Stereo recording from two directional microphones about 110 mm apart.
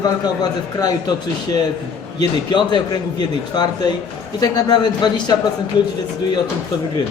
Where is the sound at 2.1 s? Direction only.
40° left (ahead or behind).